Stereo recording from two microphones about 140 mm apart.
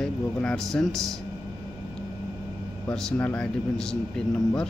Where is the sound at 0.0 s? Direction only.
5° left (ahead or behind).